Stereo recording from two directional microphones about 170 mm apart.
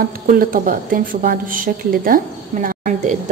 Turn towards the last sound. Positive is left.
turn(degrees=-50)  # may be behind; listen again after turning